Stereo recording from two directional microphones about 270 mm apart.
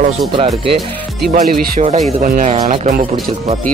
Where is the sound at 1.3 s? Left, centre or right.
Right.